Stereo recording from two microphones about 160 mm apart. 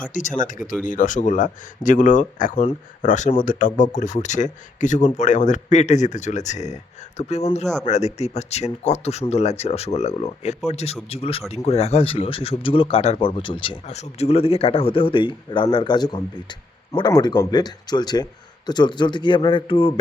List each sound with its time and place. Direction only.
0.1 s speech: 50° left (ahead or behind); by 13.7 s 30° left (ahead or behind)
13.8 s a man's voice: 45° left (ahead or behind)